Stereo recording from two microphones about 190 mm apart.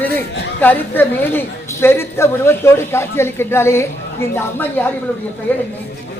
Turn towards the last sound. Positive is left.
turn(degrees=10)  # may be behind; listen again after turning